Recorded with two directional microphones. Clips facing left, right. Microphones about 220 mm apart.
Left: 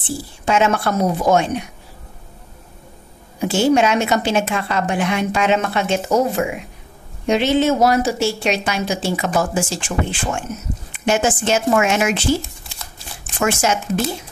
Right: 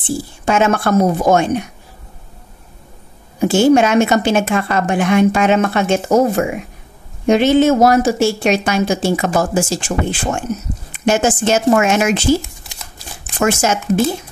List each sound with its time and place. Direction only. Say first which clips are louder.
0.5 s a woman's voice: right 3 dB; 50° right (ahead or behind)
3.3 s a woman's voice: right 4 dB; 45° right (ahead or behind)
13.4 s a woman's voice: right 3 dB; 40° right (ahead or behind)